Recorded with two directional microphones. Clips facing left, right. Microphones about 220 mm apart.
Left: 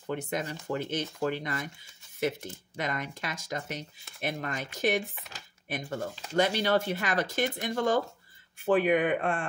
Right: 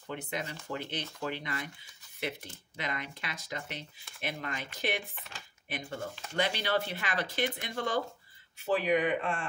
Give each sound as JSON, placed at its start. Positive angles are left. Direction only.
{"t": 0.0, "sound": "speech", "side_deg": 45}